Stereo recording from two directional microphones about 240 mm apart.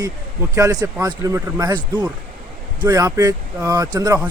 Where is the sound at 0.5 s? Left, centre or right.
Centre.